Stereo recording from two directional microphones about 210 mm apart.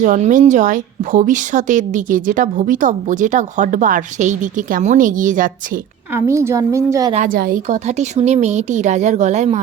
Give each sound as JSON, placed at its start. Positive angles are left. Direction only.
{"t": 0.0, "sound": "speech", "side_deg": -35}
{"t": 6.1, "sound": "a woman's voice", "side_deg": -10}
{"t": 7.1, "sound": "speech", "side_deg": -40}